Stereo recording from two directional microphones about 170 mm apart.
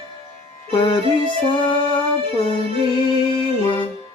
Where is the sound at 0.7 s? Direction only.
25° left (ahead or behind).